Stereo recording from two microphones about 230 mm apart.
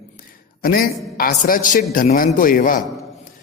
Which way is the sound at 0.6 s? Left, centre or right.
Left.